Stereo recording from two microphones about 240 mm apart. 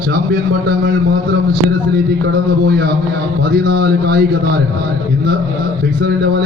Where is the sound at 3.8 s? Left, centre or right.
Right.